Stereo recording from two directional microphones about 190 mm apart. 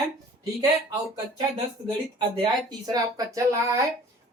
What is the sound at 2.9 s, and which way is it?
Speech, 20° right (ahead or behind).